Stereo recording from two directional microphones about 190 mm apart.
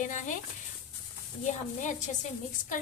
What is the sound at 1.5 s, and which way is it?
Speech, 40° left (ahead or behind).